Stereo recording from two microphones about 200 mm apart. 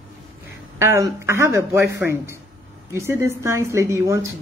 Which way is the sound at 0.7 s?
15° right (ahead or behind).